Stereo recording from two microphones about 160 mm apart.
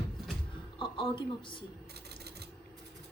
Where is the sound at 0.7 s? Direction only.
35° left (ahead or behind).